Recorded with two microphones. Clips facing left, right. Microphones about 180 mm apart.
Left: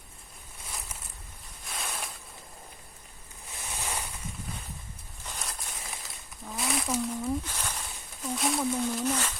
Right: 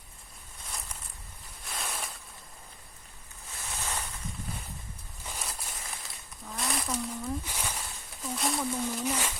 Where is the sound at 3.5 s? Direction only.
15° left (ahead or behind).